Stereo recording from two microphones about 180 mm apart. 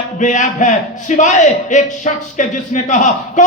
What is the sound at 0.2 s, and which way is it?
A man's voice, 45° left (ahead or behind).